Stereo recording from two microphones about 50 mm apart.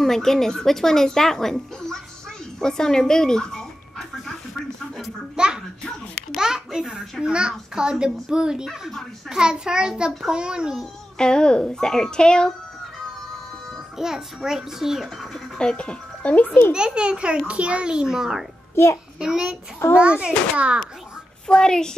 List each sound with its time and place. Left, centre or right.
0.0 s a woman's voice: centre
5.3 s a sound: centre
6.3 s a child's voice: centre
11.1 s a woman's voice: centre
13.9 s a child's voice: centre
15.5 s a child's voice: centre; by 16.7 s left
16.7 s a child's voice: centre
21.5 s a woman's voice: centre